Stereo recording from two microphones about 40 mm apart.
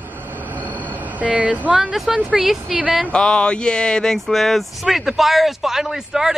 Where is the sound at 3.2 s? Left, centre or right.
Centre.